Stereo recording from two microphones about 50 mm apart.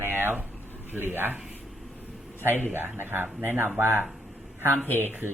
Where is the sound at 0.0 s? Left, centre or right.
Right.